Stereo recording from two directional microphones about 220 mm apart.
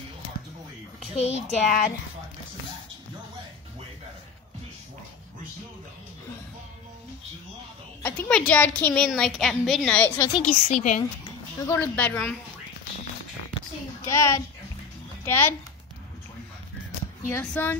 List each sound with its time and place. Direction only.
1.1 s a woman's voice: 30° left (ahead or behind)
8.0 s a woman's voice: 5° left (ahead or behind)
10.4 s a woman's voice: 35° left (ahead or behind)
11.6 s a woman's voice: 10° left (ahead or behind)
14.0 s a woman's voice: 15° left (ahead or behind)
17.3 s a woman's voice: 10° left (ahead or behind)